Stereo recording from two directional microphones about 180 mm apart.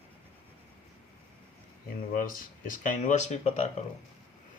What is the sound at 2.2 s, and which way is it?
Speech, 50° left (ahead or behind).